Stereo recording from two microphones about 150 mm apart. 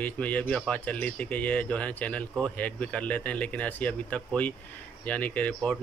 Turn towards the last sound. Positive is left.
turn(degrees=10)  # may be behind; listen again after turning